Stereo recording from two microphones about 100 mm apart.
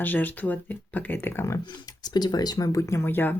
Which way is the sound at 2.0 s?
45° left (ahead or behind).